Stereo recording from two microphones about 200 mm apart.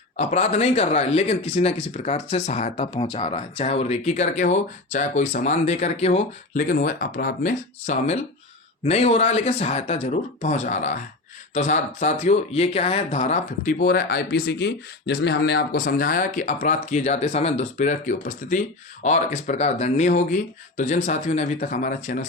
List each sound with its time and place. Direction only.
0.2 s speech: 35° left (ahead or behind)